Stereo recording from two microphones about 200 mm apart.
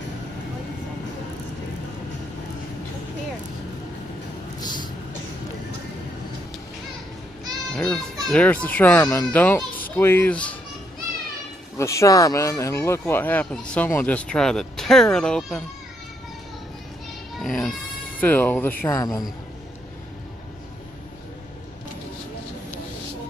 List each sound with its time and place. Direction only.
4.6 s vehicle: 20° left (ahead or behind)
7.7 s children playing: 5° left (ahead or behind)
8.3 s speech: 5° left (ahead or behind)
11.8 s speech: 15° left (ahead or behind)
17.4 s speech: centre (ahead or behind)